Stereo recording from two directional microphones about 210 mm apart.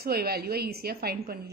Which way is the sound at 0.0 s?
50° right (ahead or behind).